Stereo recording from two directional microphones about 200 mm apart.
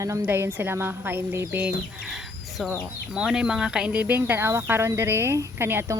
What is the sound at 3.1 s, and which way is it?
A woman's voice, 5° right (ahead or behind).